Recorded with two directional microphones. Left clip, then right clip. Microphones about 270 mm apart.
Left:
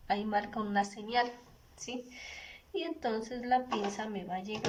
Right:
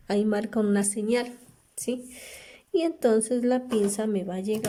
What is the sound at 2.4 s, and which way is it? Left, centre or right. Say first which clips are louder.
A woman's voice: right 13 dB; right.